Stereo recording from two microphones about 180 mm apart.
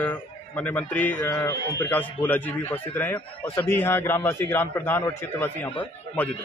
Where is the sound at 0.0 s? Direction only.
10° left (ahead or behind).